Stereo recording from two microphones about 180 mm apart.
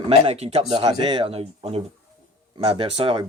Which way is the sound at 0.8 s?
25° right (ahead or behind).